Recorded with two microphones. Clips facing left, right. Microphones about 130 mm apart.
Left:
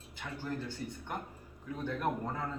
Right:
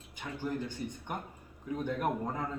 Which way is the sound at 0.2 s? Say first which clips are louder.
Right 3 dB; 15° right (ahead or behind).